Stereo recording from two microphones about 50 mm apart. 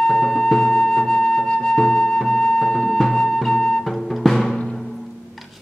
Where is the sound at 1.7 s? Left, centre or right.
Centre.